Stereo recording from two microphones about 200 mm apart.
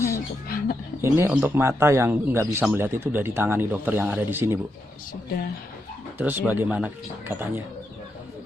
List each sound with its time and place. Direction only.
0.4 s bird: 45° left (ahead or behind)
1.0 s speech: 15° right (ahead or behind)
6.1 s speech: 10° right (ahead or behind)